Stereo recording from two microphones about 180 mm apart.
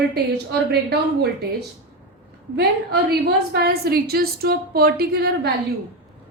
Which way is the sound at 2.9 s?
65° right (ahead or behind).